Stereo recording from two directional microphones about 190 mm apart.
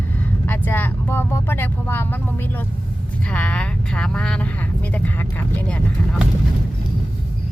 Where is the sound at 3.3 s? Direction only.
5° left (ahead or behind).